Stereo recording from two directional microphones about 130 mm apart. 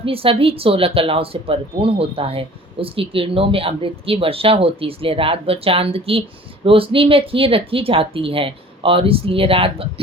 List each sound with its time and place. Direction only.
0.0 s speech: 45° right (ahead or behind)